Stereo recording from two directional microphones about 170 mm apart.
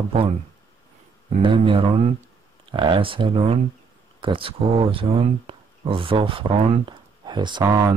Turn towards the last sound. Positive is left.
turn(degrees=-25)  # may be behind; listen again after turning